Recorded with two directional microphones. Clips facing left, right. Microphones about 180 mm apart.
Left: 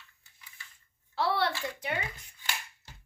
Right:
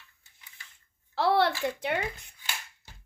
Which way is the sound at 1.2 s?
65° right (ahead or behind).